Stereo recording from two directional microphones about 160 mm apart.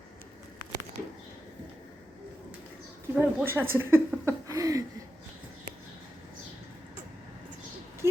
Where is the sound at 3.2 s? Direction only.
15° right (ahead or behind).